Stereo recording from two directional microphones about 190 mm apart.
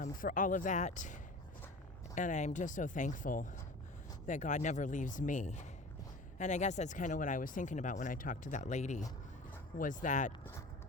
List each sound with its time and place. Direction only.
0.0 s speech: 45° left (ahead or behind)